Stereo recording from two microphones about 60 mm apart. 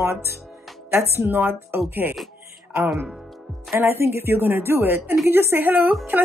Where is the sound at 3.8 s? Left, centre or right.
Right.